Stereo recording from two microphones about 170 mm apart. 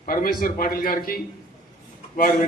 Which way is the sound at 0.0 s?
55° left (ahead or behind).